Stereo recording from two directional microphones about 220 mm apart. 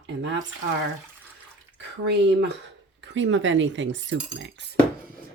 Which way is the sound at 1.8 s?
50° right (ahead or behind).